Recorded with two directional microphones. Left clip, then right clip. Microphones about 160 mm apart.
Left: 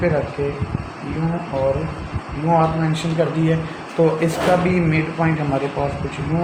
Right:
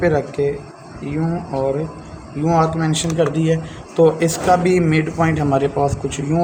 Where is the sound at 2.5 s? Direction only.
55° right (ahead or behind).